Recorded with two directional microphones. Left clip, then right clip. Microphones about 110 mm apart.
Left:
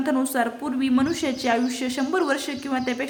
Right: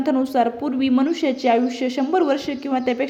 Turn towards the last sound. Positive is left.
turn(degrees=-30)  # may be behind; listen again after turning